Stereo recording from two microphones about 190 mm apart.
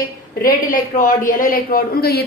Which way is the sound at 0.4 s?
45° left (ahead or behind).